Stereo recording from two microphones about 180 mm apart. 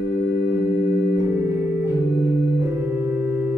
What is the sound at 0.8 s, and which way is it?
Music, 60° left (ahead or behind).